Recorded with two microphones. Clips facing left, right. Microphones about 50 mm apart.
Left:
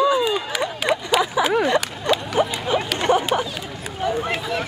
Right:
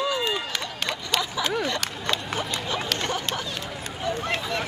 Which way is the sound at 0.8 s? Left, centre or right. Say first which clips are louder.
Left 8 dB; centre.